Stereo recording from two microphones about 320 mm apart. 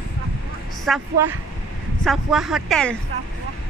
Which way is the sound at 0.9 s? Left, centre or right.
Centre.